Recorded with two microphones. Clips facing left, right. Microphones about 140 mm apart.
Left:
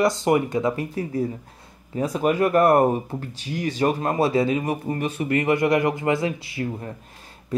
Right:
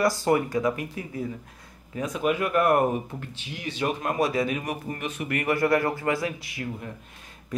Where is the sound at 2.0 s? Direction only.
35° left (ahead or behind).